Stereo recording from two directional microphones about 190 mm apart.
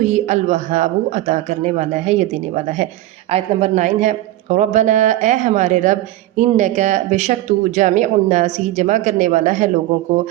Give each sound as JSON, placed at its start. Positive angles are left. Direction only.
{"t": 0.0, "sound": "speech", "side_deg": -35}